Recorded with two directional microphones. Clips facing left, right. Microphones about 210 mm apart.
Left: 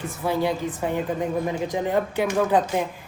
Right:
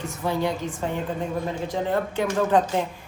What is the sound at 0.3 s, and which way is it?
Speech, 15° left (ahead or behind).